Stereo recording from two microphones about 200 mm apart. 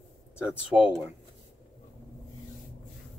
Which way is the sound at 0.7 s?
15° right (ahead or behind).